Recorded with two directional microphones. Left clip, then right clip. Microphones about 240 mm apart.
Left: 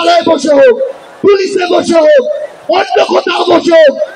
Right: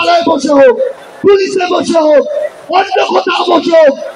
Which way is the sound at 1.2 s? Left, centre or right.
Left.